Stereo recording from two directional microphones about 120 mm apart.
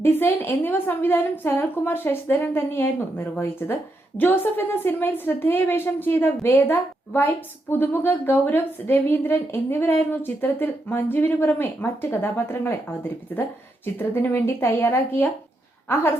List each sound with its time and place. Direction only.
0.0 s a woman's voice: 20° left (ahead or behind)